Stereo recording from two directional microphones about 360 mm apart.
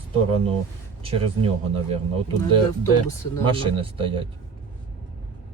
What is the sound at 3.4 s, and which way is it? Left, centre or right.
Speech, centre.